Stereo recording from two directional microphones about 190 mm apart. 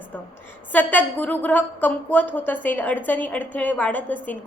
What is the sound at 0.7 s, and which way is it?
A woman's voice, 10° left (ahead or behind).